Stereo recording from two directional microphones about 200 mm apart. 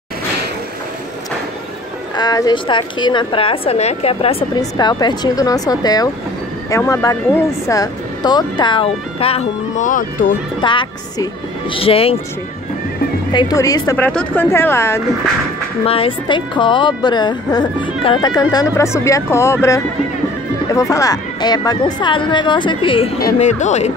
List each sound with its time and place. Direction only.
2.1 s a woman's voice: 20° left (ahead or behind); by 10.0 s 40° left (ahead or behind)
10.6 s a woman's voice: 25° left (ahead or behind)
13.3 s a woman's voice: 20° left (ahead or behind)
15.8 s a woman's voice: 30° left (ahead or behind)